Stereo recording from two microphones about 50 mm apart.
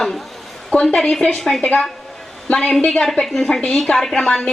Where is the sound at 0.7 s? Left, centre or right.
Left.